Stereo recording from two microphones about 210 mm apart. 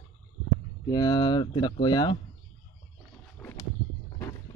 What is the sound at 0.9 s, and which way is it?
Speech, 20° left (ahead or behind).